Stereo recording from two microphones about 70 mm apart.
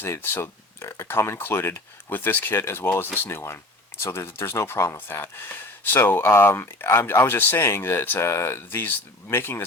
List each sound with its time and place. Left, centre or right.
0.0 s speech: left